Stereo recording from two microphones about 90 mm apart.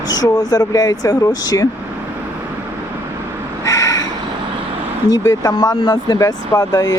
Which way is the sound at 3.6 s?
40° left (ahead or behind).